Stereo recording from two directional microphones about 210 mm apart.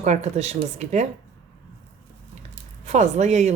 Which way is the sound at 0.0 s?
35° right (ahead or behind).